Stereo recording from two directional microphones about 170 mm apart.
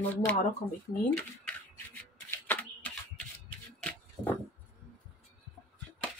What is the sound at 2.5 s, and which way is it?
Shuffling cards, 10° left (ahead or behind).